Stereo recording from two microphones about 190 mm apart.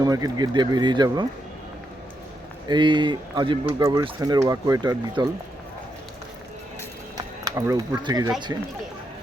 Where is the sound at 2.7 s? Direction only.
25° right (ahead or behind).